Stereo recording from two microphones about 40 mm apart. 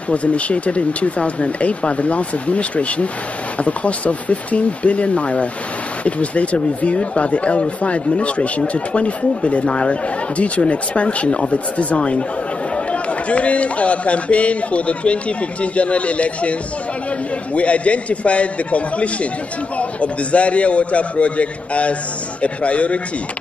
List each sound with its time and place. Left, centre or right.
0.1 s a man's voice: left
17.6 s a man's voice: left